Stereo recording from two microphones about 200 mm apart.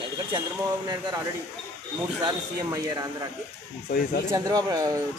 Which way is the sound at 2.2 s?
20° right (ahead or behind).